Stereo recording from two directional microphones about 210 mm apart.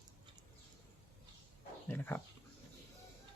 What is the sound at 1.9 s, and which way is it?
Speech, 10° left (ahead or behind).